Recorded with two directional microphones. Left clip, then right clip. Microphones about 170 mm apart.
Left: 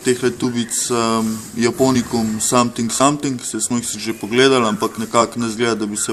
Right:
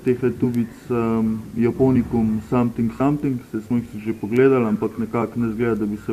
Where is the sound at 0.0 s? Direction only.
40° left (ahead or behind).